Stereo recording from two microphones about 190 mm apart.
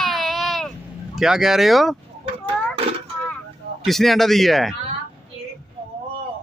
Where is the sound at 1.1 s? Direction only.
Centre (ahead or behind).